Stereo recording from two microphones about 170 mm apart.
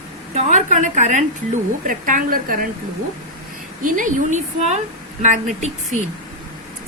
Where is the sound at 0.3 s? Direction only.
40° right (ahead or behind).